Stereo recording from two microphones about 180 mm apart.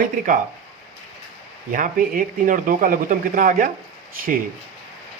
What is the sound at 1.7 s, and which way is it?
Speech, 50° right (ahead or behind).